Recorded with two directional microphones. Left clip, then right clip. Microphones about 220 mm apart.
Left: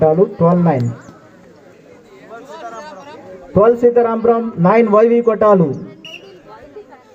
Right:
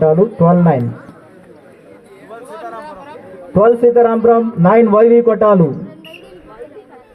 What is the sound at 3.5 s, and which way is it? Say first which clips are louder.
A man's voice: right 1 dB; 50° right (ahead or behind).